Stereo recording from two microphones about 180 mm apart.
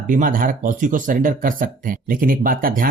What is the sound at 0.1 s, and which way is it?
Speech, 50° right (ahead or behind).